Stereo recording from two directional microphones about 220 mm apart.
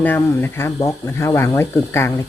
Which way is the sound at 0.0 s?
10° left (ahead or behind).